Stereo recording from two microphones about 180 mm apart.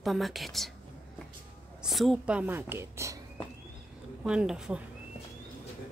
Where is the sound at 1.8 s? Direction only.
Centre (ahead or behind).